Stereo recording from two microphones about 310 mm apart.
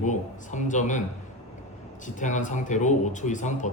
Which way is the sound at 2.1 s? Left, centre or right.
Left.